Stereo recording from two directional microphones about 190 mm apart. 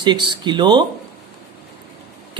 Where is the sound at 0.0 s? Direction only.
25° right (ahead or behind).